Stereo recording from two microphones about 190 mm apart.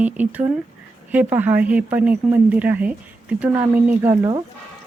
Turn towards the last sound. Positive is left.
turn(degrees=-15)  # may be behind; listen again after turning